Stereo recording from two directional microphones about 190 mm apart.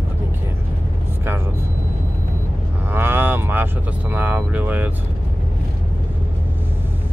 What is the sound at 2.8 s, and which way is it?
Speech, 10° right (ahead or behind).